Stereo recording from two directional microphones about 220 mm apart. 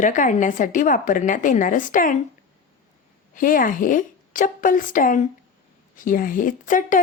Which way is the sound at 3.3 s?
40° left (ahead or behind).